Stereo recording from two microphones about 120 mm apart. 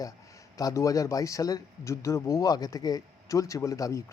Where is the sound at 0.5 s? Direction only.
30° left (ahead or behind).